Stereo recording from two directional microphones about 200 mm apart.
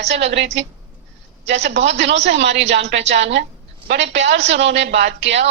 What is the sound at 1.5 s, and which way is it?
Speech, 60° right (ahead or behind).